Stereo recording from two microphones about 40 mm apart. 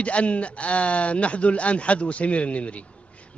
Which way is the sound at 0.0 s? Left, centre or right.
Left.